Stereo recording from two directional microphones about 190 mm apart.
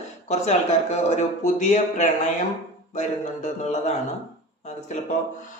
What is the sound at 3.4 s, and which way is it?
Speech, 35° left (ahead or behind).